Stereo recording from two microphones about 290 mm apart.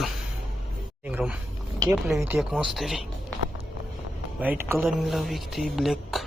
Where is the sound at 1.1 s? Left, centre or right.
Centre.